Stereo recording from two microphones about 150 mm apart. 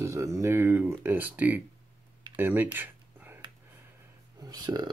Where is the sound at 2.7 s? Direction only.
15° right (ahead or behind).